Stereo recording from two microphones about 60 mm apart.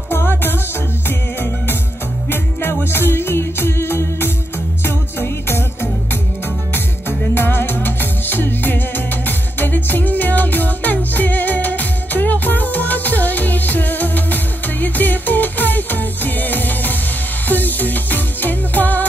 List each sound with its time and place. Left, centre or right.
0.1 s music: left